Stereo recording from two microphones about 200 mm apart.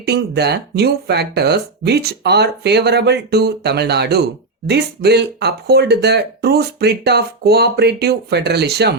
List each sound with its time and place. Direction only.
0.0 s speech: 55° right (ahead or behind)